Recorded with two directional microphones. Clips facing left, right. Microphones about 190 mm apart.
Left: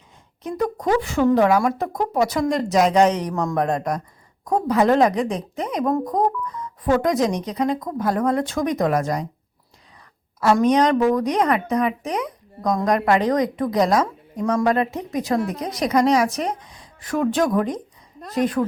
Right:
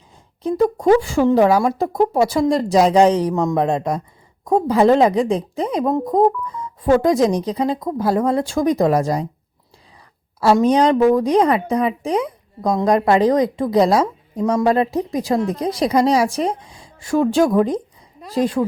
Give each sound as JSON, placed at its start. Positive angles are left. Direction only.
{"t": 0.4, "sound": "a woman's voice", "side_deg": -25}
{"t": 10.4, "sound": "a woman's voice", "side_deg": -30}